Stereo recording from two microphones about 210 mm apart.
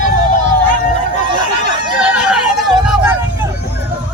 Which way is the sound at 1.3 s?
20° right (ahead or behind).